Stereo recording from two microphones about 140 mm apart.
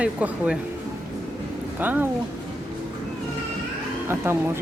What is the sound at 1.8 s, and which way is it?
Speech, 10° right (ahead or behind).